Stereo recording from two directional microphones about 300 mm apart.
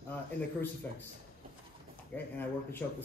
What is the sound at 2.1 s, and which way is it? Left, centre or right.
Speech, centre.